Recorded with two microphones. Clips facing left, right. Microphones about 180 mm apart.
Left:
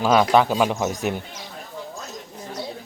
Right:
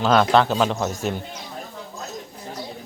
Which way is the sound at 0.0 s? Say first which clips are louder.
Even; 10° left (ahead or behind).